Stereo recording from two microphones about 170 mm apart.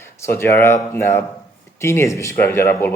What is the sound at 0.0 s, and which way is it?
Speech, 15° left (ahead or behind).